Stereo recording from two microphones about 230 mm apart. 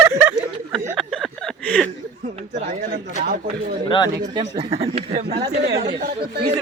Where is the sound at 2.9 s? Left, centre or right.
Right.